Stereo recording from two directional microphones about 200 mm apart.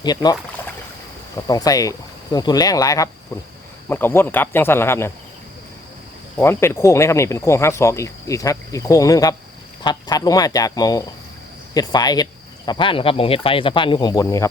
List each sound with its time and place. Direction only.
0.0 s speech: 20° left (ahead or behind)
1.5 s speech: 20° left (ahead or behind)
6.3 s speech: 10° left (ahead or behind)